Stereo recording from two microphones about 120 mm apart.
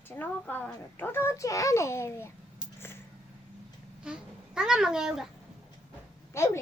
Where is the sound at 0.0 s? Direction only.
15° left (ahead or behind).